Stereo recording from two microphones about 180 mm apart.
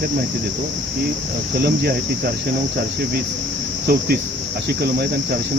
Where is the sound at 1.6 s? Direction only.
60° right (ahead or behind).